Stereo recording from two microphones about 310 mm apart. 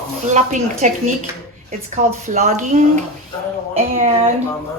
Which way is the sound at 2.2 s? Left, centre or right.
Right.